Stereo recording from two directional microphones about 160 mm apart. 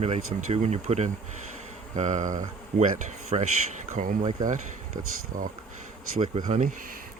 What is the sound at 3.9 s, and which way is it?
Speech, 55° right (ahead or behind).